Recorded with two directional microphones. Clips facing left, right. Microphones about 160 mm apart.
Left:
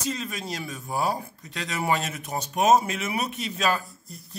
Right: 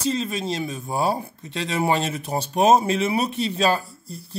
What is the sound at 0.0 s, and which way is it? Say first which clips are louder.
Speech: right 7 dB; 30° right (ahead or behind).